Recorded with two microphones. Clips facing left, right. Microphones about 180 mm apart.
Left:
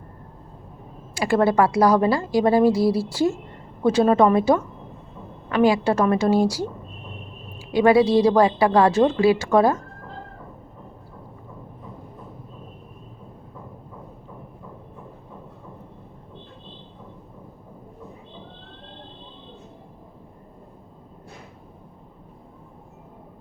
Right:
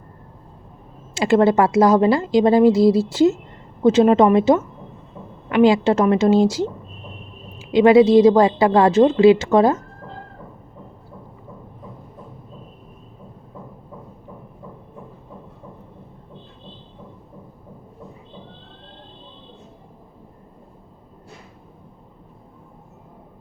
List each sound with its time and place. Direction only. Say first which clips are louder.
1.1 s a woman's voice: right 4 dB; 25° right (ahead or behind)